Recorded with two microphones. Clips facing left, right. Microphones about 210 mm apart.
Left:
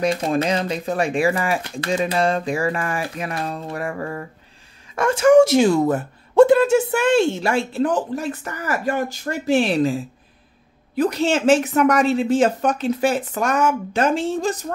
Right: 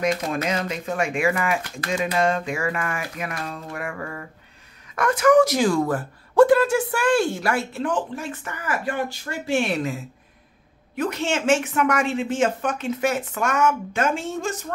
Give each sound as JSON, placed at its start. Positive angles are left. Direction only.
{"t": 0.0, "sound": "speech", "side_deg": 30}